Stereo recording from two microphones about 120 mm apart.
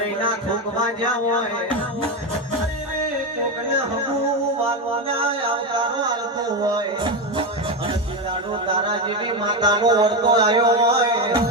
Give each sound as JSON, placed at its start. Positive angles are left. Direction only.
{"t": 5.0, "sound": "a sound", "side_deg": -50}
{"t": 6.7, "sound": "music", "side_deg": -40}
{"t": 8.8, "sound": "speech", "side_deg": -40}